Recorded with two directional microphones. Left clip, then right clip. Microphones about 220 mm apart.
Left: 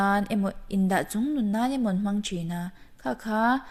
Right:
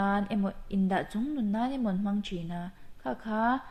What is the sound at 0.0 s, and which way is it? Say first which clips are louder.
A woman's voice: left 5 dB; 50° left (ahead or behind).